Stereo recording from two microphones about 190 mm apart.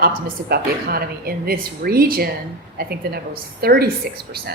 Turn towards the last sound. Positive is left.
turn(degrees=-55)  # may be behind; listen again after turning